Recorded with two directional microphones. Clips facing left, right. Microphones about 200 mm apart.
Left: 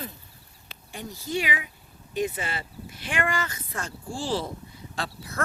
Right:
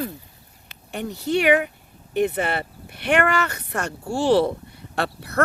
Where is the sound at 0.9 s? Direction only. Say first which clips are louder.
Right 8 dB; 65° right (ahead or behind).